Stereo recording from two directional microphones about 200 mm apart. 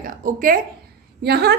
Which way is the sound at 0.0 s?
45° right (ahead or behind).